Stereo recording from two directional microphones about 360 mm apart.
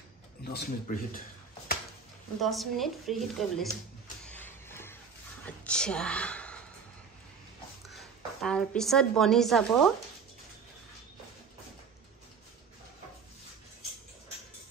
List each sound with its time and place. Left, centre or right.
0.4 s speech: left
2.4 s a woman's voice: centre
4.3 s a sound: centre
5.4 s gasp: centre
7.9 s a woman's voice: centre